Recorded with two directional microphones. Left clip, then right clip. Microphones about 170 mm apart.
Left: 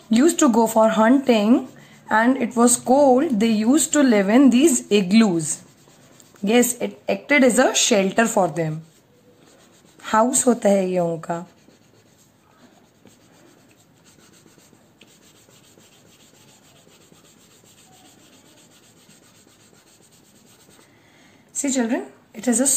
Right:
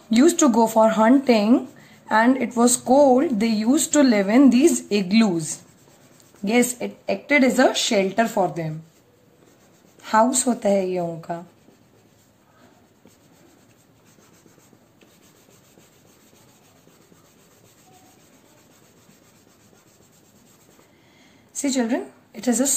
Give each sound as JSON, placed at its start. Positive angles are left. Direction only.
{"t": 0.1, "sound": "speech", "side_deg": 5}
{"t": 10.0, "sound": "speech", "side_deg": 20}
{"t": 21.5, "sound": "a woman's voice", "side_deg": 0}